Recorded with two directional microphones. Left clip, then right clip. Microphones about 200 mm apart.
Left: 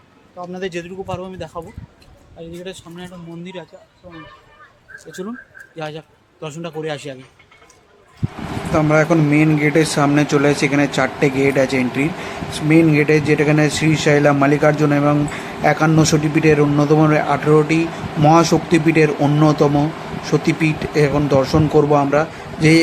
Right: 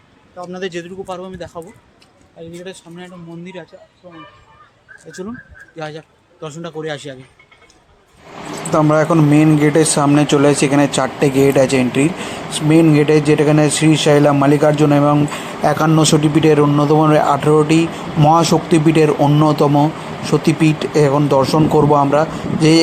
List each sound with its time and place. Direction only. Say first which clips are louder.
0.5 s speech: right 1 dB; 5° right (ahead or behind)
5.2 s a man's voice: right 1 dB; 5° left (ahead or behind)
8.7 s speech: right 2 dB; 15° right (ahead or behind)